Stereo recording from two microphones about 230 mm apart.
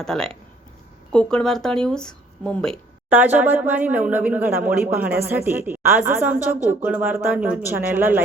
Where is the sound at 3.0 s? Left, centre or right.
Centre.